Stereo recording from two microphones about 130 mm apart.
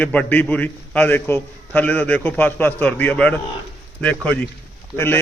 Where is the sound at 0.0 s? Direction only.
10° left (ahead or behind).